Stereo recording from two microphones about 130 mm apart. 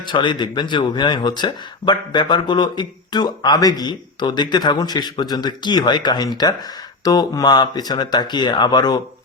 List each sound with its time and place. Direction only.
0.1 s speech: 35° left (ahead or behind)